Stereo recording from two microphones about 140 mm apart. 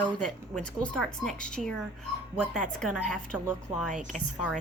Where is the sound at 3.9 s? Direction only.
60° right (ahead or behind).